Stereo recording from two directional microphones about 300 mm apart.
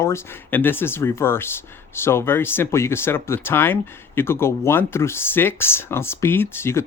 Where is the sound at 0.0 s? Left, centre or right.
Centre.